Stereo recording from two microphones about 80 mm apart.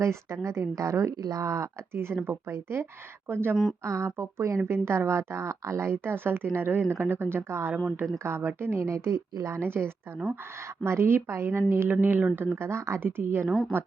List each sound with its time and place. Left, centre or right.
0.0 s speech: right